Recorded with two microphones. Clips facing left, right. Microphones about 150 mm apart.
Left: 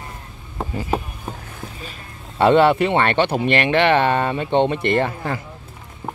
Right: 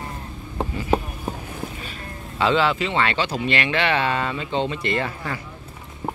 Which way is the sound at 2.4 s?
55° left (ahead or behind).